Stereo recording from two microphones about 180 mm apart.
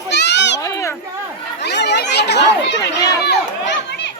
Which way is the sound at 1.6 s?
70° left (ahead or behind).